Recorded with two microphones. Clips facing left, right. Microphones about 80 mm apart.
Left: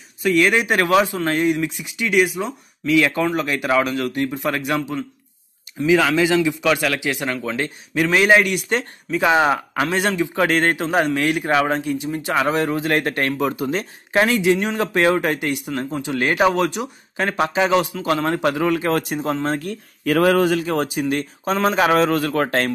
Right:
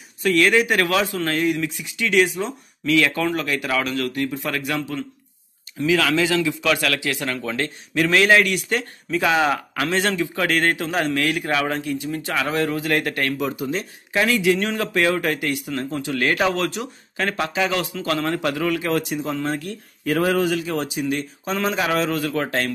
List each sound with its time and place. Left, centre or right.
0.2 s speech: centre
0.5 s a man's voice: left
9.8 s speech: centre
10.3 s a man's voice: left
13.4 s a man's voice: left
20.1 s speech: left
20.3 s speech: left